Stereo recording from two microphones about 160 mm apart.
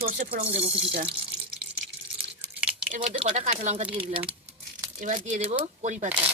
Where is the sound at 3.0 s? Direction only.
35° right (ahead or behind).